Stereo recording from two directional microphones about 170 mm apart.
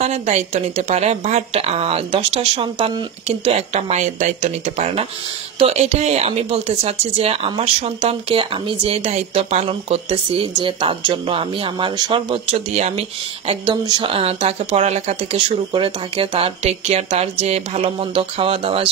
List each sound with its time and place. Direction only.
0.0 s speech: 40° right (ahead or behind)
13.5 s speech: 25° right (ahead or behind)